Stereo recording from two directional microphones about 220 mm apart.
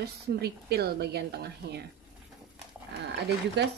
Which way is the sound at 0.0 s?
45° right (ahead or behind).